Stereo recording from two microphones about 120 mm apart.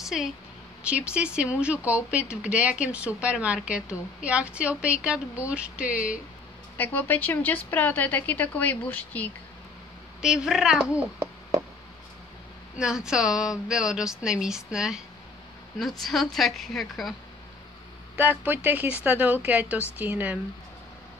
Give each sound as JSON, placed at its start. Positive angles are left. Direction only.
{"t": 0.0, "sound": "a woman's voice", "side_deg": -5}
{"t": 6.8, "sound": "a woman's voice", "side_deg": 15}
{"t": 10.2, "sound": "speech", "side_deg": -5}
{"t": 12.7, "sound": "speech", "side_deg": -5}
{"t": 16.0, "sound": "speech", "side_deg": 0}
{"t": 18.1, "sound": "a woman's voice", "side_deg": -15}